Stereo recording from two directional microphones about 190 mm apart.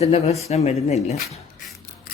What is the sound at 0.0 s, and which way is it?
A man's voice, 35° left (ahead or behind).